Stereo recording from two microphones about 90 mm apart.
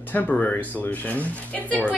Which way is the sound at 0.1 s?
20° left (ahead or behind).